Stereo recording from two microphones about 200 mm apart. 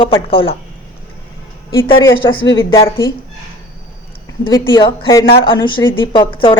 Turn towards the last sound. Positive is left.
turn(degrees=25)  # may be behind; listen again after turning